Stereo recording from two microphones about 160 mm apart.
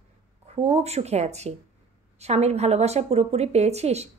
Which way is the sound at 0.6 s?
40° right (ahead or behind).